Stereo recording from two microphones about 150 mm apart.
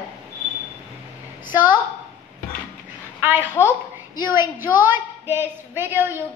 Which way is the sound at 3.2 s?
15° right (ahead or behind).